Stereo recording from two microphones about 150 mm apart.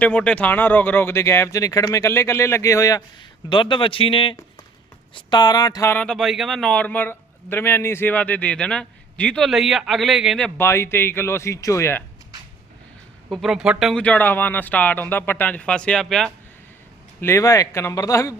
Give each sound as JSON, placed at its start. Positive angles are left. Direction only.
{"t": 0.0, "sound": "a man's voice", "side_deg": 10}
{"t": 3.5, "sound": "speech", "side_deg": 35}
{"t": 5.9, "sound": "a man's voice", "side_deg": 5}
{"t": 10.6, "sound": "a man's voice", "side_deg": 15}
{"t": 13.3, "sound": "speech", "side_deg": 0}
{"t": 14.0, "sound": "a man's voice", "side_deg": 10}
{"t": 17.2, "sound": "speech", "side_deg": 20}